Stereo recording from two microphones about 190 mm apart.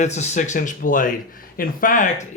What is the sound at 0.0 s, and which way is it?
Speech, 35° left (ahead or behind).